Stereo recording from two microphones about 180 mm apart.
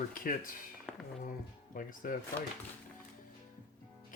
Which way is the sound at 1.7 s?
50° left (ahead or behind).